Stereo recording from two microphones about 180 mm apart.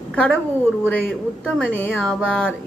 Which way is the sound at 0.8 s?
5° left (ahead or behind).